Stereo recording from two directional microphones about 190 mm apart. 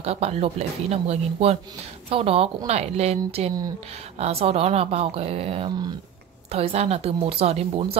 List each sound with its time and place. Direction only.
0.0 s speech: 35° right (ahead or behind)